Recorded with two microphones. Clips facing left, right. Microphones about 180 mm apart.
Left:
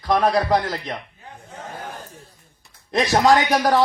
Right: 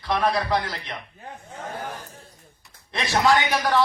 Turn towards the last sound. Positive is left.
turn(degrees=40)  # may be behind; listen again after turning